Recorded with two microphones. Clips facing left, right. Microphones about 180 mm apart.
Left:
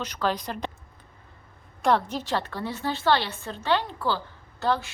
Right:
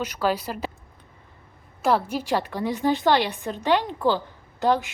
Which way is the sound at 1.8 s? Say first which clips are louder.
Right 1 dB; 5° right (ahead or behind).